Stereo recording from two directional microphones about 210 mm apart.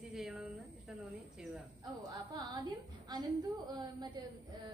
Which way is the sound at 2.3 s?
20° right (ahead or behind).